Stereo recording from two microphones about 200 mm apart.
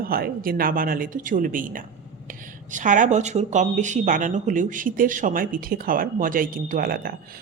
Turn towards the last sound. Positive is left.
turn(degrees=-50)  # may be behind; listen again after turning